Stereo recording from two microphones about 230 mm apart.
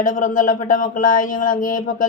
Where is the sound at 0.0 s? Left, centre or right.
Left.